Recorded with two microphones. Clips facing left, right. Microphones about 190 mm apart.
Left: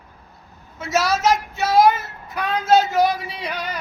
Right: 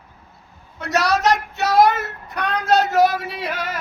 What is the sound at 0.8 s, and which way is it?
Child singing, centre (ahead or behind).